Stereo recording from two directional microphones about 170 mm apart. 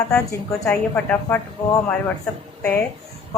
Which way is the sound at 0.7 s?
15° left (ahead or behind).